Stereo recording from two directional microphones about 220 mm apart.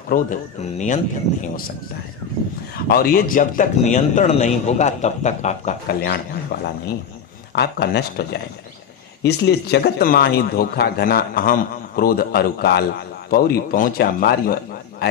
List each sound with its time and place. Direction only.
0.1 s a man's voice: 35° left (ahead or behind)
2.9 s a man's voice: 45° left (ahead or behind)